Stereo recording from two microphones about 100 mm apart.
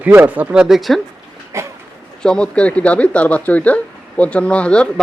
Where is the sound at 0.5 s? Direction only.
5° right (ahead or behind).